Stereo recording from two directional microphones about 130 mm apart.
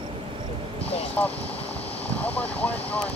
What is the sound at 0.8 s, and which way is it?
Vehicle, 50° left (ahead or behind).